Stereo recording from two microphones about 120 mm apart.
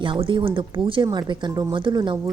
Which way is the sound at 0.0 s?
45° right (ahead or behind).